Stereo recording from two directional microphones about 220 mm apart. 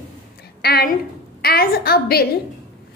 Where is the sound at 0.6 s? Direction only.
45° left (ahead or behind).